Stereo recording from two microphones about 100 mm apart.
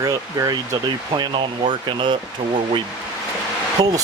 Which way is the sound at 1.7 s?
50° right (ahead or behind).